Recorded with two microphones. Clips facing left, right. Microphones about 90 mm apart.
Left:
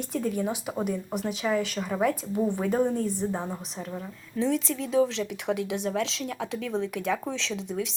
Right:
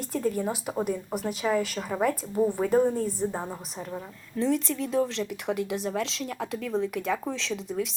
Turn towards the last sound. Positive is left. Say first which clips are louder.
# right 1 dB
turn(degrees=0)  # may be behind; listen again after turning